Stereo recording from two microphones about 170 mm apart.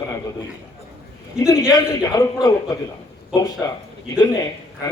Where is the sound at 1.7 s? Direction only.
20° left (ahead or behind).